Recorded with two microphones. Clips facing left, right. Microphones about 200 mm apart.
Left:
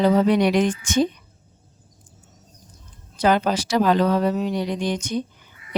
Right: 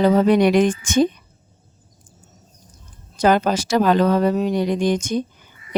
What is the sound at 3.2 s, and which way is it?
A woman's voice, 45° right (ahead or behind).